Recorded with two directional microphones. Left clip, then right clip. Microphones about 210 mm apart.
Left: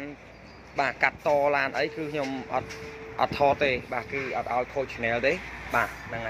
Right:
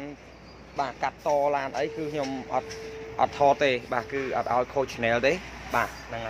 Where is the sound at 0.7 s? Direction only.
15° left (ahead or behind); by 5.4 s 20° right (ahead or behind).